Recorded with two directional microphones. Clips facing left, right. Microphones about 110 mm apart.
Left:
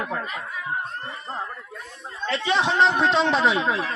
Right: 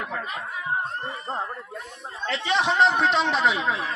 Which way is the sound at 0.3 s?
25° right (ahead or behind).